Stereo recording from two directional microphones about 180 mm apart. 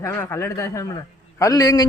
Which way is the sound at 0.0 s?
15° left (ahead or behind).